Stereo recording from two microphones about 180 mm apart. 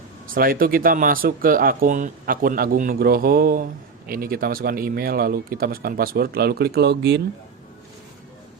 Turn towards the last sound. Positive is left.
turn(degrees=-70)  # may be behind; listen again after turning